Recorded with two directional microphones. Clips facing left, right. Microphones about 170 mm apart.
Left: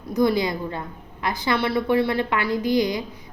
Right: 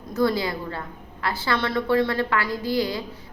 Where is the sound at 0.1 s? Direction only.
15° left (ahead or behind).